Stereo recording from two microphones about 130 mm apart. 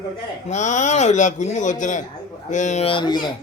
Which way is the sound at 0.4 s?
65° left (ahead or behind).